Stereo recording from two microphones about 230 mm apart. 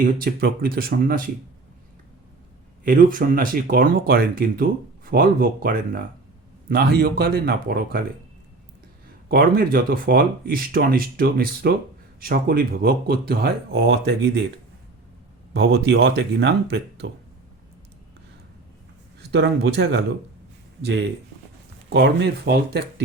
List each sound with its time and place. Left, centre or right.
0.0 s speech: right
2.8 s speech: right
9.3 s speech: right
15.5 s speech: right
19.3 s speech: right
21.8 s speech: right